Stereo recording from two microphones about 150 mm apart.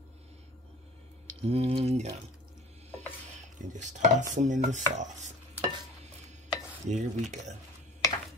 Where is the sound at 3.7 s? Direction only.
55° right (ahead or behind).